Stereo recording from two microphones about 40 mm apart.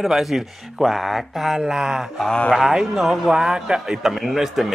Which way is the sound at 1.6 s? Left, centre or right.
Centre.